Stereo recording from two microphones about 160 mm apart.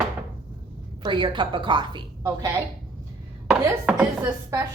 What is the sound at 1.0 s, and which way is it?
A woman's voice, 30° right (ahead or behind).